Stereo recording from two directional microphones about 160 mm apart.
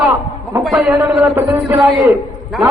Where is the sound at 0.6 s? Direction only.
Centre (ahead or behind); by 2.1 s 25° right (ahead or behind).